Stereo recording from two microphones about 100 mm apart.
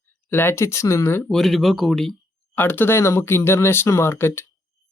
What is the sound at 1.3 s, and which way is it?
Speech, centre (ahead or behind).